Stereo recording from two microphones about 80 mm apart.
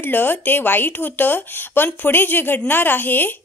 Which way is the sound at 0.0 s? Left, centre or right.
Left.